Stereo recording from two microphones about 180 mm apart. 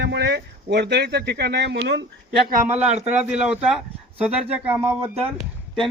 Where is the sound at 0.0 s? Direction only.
70° right (ahead or behind).